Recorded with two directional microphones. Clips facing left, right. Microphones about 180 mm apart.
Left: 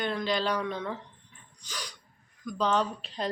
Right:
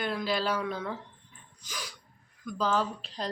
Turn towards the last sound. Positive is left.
turn(degrees=0)  # may be behind; listen again after turning